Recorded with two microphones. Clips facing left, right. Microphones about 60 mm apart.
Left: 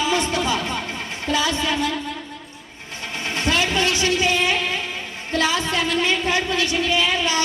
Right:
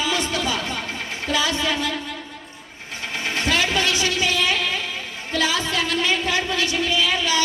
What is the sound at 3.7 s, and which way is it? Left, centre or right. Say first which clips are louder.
Vehicle: left 1 dB; left.